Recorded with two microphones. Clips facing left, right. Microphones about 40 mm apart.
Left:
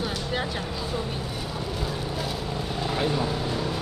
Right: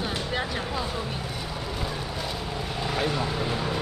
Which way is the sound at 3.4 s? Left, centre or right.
Centre.